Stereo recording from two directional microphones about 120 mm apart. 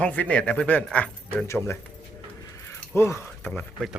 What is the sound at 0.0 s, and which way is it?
Speech, 10° left (ahead or behind).